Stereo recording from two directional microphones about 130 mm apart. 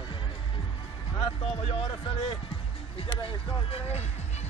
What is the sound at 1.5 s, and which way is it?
Speech, 45° left (ahead or behind).